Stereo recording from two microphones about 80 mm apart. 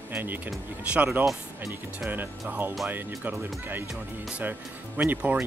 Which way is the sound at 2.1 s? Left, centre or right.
Right.